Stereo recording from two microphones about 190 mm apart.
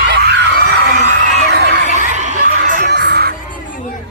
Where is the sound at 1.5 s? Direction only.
60° right (ahead or behind).